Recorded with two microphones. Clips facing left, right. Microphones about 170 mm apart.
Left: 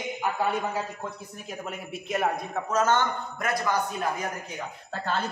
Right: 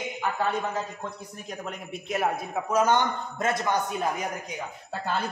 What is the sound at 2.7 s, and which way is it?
Speech, 10° right (ahead or behind).